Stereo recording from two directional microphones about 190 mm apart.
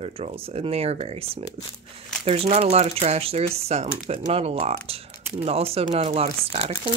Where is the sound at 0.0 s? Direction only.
30° right (ahead or behind).